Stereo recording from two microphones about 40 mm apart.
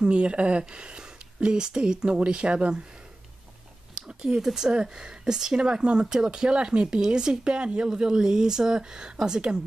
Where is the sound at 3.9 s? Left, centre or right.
Right.